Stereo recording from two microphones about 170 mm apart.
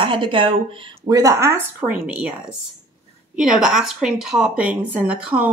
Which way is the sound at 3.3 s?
5° right (ahead or behind).